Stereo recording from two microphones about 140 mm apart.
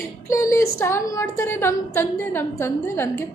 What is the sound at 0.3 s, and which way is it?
A woman's voice, 20° left (ahead or behind).